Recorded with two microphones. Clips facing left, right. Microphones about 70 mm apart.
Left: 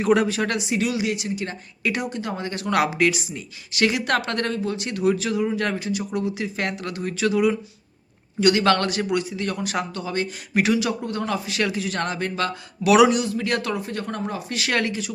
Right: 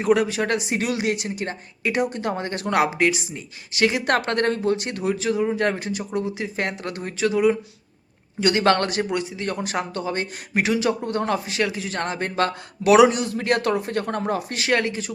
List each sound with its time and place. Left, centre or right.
0.3 s speech: centre
0.6 s speech: right
2.6 s speech: right
4.0 s speech: right
5.0 s speech: right
5.8 s speech: right
6.1 s speech: right
11.6 s speech: centre
11.9 s speech: right
12.4 s speech: right
12.9 s speech: right
13.1 s speech: right
14.6 s speech: right